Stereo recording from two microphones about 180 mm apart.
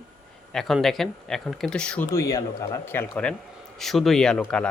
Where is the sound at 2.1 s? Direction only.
20° left (ahead or behind).